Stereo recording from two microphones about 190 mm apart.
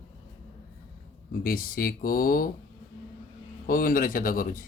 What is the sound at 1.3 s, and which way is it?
Speech, 50° left (ahead or behind).